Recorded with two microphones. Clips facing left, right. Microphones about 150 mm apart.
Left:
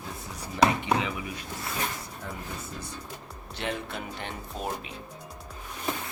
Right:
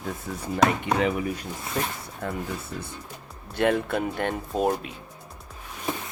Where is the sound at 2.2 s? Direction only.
65° right (ahead or behind).